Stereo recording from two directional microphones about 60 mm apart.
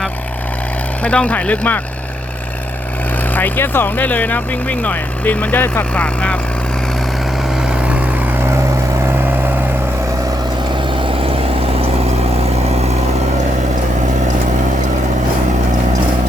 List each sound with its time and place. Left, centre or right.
1.0 s speech: centre
3.3 s speech: left
5.9 s speech: centre
7.5 s vehicle: centre